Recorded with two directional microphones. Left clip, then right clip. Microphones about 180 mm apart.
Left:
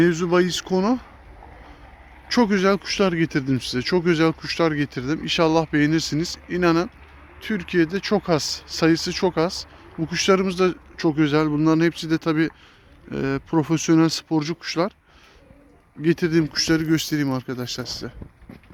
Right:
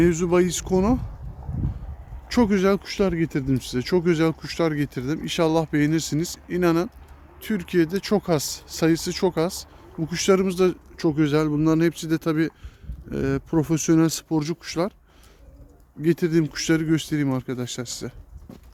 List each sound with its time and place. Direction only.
0.0 s speech: 15° right (ahead or behind)
2.2 s speech: 15° right (ahead or behind)
16.0 s speech: 15° right (ahead or behind)